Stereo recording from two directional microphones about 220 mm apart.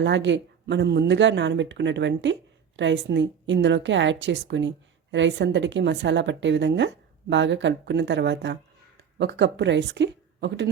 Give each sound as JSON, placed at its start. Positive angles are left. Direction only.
{"t": 0.0, "sound": "a woman's voice", "side_deg": -55}